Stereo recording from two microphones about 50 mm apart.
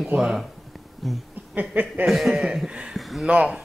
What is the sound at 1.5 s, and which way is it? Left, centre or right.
Chuckle, right.